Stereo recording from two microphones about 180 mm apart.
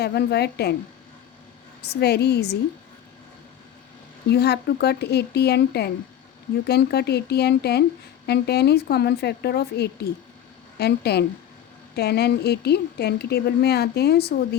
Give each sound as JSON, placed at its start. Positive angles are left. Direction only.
{"t": 0.0, "sound": "speech", "side_deg": 65}
{"t": 1.8, "sound": "speech", "side_deg": 65}
{"t": 4.3, "sound": "speech", "side_deg": 65}